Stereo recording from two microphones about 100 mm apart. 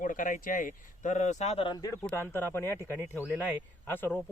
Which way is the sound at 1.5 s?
75° left (ahead or behind).